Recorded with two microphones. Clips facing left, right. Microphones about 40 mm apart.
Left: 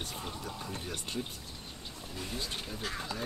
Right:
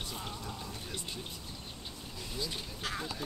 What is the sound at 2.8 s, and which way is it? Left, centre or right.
Speech, centre.